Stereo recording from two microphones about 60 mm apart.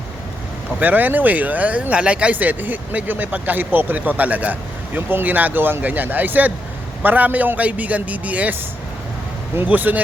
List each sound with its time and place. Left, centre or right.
0.8 s speech: right
9.6 s speech: right